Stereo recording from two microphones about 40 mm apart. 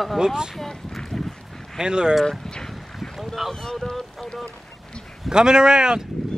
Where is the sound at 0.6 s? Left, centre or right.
Centre.